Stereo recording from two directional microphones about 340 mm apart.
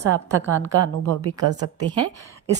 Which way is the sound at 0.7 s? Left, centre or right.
Right.